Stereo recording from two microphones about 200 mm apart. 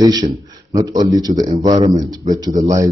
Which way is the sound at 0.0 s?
15° right (ahead or behind).